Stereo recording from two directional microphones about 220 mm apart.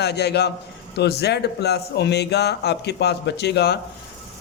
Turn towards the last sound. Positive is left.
turn(degrees=50)  # may be behind; listen again after turning